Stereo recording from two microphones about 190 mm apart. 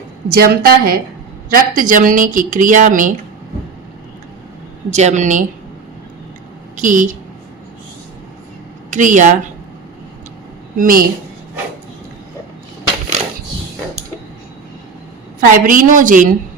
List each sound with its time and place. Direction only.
0.3 s speech: 50° right (ahead or behind)
4.9 s speech: 35° right (ahead or behind)
6.7 s speech: 40° right (ahead or behind)
8.9 s speech: 40° right (ahead or behind)
10.8 s speech: 45° right (ahead or behind)
15.4 s speech: 45° right (ahead or behind)